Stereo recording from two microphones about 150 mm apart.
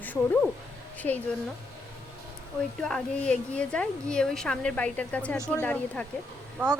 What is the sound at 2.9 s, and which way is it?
Speech, 5° left (ahead or behind).